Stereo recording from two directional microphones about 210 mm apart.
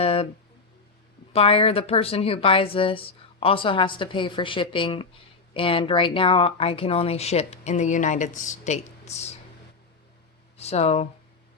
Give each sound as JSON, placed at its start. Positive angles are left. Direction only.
{"t": 0.0, "sound": "a sound", "side_deg": 30}
{"t": 1.3, "sound": "speech", "side_deg": 25}
{"t": 10.6, "sound": "speech", "side_deg": 30}